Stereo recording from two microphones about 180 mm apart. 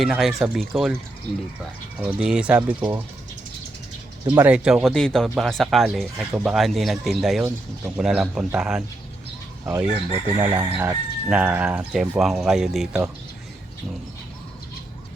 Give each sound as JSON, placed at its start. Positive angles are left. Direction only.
{"t": 0.0, "sound": "speech", "side_deg": 0}
{"t": 2.0, "sound": "speech", "side_deg": -5}
{"t": 4.4, "sound": "speech", "side_deg": -5}
{"t": 9.8, "sound": "speech", "side_deg": -35}
{"t": 10.4, "sound": "speech", "side_deg": -10}